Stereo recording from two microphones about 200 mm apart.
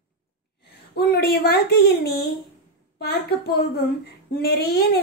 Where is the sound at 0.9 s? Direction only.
50° left (ahead or behind).